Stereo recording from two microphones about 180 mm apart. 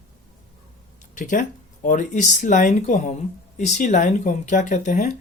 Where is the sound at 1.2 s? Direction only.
45° left (ahead or behind).